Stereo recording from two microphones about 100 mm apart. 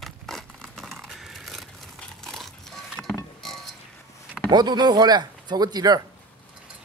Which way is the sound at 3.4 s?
Centre (ahead or behind).